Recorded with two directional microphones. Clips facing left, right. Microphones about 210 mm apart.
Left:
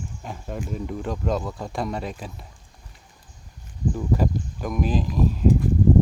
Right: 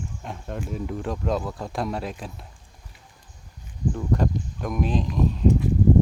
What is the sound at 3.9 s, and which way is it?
Speech, 5° left (ahead or behind).